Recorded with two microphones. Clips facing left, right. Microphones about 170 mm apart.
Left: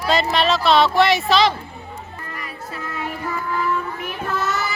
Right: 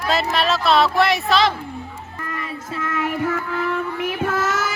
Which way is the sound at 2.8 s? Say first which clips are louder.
Right 6 dB; 90° right.